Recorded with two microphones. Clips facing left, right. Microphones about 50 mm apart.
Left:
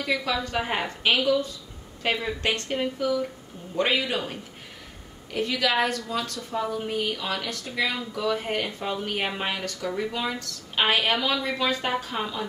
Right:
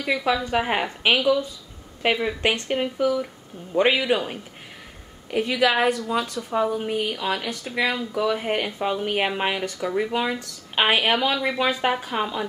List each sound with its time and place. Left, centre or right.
0.0 s a woman's voice: centre